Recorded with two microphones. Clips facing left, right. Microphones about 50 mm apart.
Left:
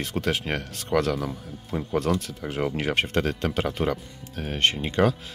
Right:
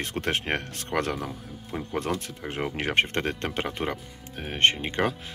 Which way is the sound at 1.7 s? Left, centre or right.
Centre.